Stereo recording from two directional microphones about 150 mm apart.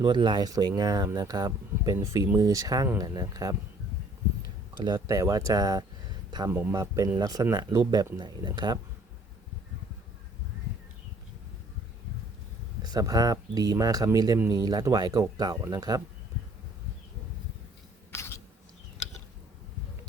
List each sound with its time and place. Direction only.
0.0 s speech: 30° right (ahead or behind)
4.9 s speech: 20° right (ahead or behind)
6.5 s speech: 15° right (ahead or behind)
12.8 s speech: 25° right (ahead or behind)
18.1 s a sound: 15° left (ahead or behind)